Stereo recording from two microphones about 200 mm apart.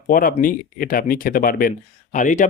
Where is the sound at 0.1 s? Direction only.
45° left (ahead or behind).